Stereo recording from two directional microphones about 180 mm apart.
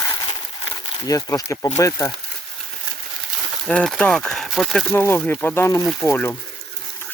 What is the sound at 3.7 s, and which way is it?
Speech, 5° left (ahead or behind).